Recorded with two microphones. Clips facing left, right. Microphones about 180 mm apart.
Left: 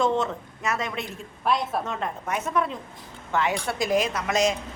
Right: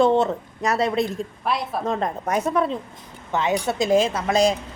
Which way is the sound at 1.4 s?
Centre (ahead or behind).